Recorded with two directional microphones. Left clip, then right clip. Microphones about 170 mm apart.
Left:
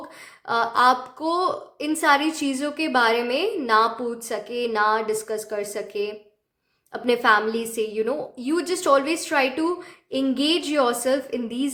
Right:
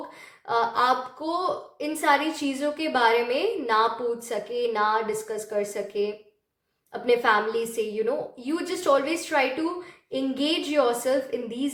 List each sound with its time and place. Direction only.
0.4 s a woman's voice: 40° left (ahead or behind)